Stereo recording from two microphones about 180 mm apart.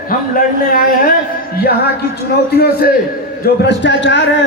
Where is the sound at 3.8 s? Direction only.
80° left.